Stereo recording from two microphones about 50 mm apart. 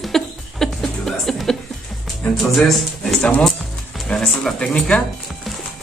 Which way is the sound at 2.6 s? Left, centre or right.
Centre.